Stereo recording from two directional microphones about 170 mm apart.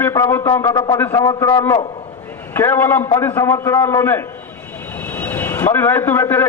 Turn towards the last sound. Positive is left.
turn(degrees=15)  # may be behind; listen again after turning